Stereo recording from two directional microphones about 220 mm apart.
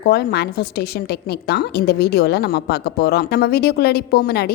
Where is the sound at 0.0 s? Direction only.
45° left (ahead or behind).